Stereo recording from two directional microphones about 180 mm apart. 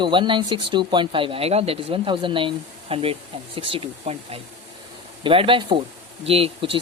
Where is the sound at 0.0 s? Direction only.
25° right (ahead or behind).